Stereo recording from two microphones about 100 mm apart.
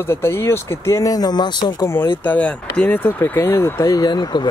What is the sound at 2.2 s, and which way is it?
Speech, 15° left (ahead or behind).